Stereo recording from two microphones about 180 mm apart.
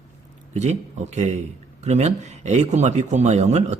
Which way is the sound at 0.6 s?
40° right (ahead or behind).